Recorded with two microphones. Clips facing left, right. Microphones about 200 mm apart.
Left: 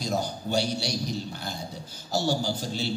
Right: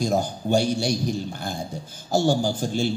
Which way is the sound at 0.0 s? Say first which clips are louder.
Right 6 dB; 50° right (ahead or behind).